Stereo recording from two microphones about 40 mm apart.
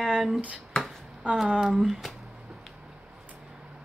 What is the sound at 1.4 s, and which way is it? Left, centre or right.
Speech, centre.